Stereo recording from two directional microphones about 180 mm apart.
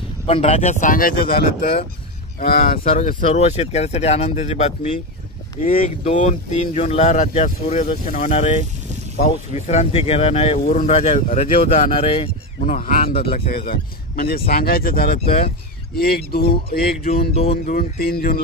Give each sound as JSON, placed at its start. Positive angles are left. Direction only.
{"t": 0.3, "sound": "speech", "side_deg": 35}
{"t": 2.8, "sound": "speech", "side_deg": 35}
{"t": 5.6, "sound": "speech", "side_deg": 50}
{"t": 6.0, "sound": "speech", "side_deg": 40}
{"t": 10.6, "sound": "speech", "side_deg": 45}
{"t": 12.5, "sound": "speech", "side_deg": 45}
{"t": 17.3, "sound": "speech", "side_deg": 35}
{"t": 17.7, "sound": "speech", "side_deg": 55}